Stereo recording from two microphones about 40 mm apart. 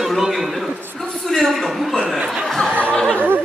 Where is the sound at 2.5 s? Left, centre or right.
Centre.